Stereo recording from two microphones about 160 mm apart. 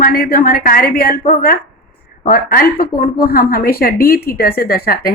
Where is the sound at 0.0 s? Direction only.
65° left (ahead or behind).